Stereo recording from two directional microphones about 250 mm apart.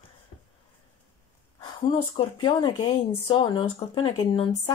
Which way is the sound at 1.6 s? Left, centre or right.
Centre.